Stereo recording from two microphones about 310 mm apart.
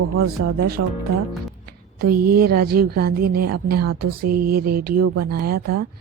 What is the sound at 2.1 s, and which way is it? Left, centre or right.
Speech, right.